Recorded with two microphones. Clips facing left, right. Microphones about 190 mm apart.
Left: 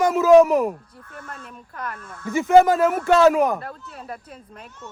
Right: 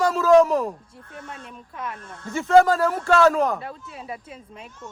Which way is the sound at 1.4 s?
Centre (ahead or behind).